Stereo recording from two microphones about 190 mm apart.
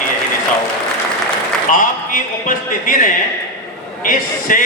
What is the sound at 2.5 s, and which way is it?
A man's voice, 45° left (ahead or behind).